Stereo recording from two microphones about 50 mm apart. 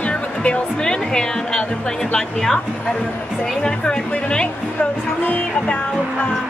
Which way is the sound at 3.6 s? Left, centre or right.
Centre.